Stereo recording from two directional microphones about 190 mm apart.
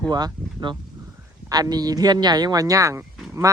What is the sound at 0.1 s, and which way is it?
Speech, 25° right (ahead or behind).